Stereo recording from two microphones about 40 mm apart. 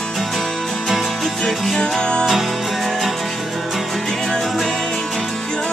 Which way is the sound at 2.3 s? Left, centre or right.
Centre.